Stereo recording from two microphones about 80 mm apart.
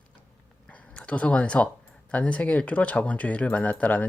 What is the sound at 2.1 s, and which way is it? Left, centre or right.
Speech, centre.